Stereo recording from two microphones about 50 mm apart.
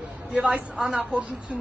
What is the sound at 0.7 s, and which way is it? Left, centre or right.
Speech, centre.